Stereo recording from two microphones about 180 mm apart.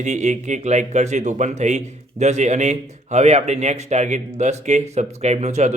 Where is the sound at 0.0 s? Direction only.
40° right (ahead or behind).